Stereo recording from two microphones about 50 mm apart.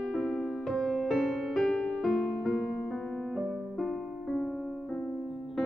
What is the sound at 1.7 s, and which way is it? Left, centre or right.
Music, centre.